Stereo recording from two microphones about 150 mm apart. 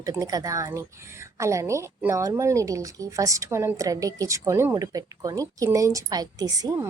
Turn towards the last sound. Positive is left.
turn(degrees=-20)  # may be behind; listen again after turning